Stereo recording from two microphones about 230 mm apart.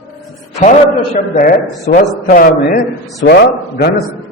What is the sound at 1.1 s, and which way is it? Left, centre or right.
A man's voice, left.